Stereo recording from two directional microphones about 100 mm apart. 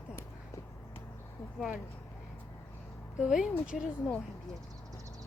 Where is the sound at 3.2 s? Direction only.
5° right (ahead or behind).